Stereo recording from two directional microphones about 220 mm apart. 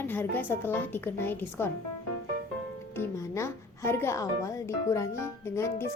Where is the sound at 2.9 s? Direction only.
10° left (ahead or behind).